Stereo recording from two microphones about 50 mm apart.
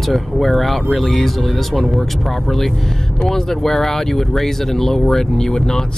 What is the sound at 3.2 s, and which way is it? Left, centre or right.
Speech, centre.